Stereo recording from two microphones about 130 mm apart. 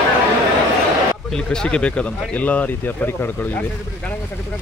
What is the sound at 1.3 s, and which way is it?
Speech, 5° left (ahead or behind).